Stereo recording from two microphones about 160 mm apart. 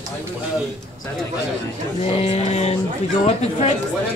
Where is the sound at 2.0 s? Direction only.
40° left (ahead or behind).